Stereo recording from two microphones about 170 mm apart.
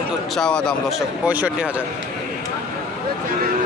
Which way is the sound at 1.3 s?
10° right (ahead or behind).